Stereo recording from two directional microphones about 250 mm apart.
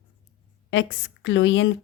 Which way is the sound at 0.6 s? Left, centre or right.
Left.